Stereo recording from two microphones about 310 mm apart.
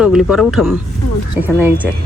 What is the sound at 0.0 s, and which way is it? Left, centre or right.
A woman's voice, centre.